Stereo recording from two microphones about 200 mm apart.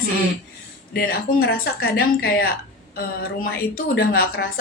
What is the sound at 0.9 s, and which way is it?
Speech, 50° left (ahead or behind).